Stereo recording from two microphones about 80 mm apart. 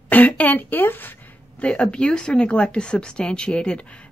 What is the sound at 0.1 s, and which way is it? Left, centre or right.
A woman's voice, centre.